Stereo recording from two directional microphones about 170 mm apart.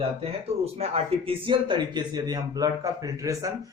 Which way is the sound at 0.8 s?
35° right (ahead or behind).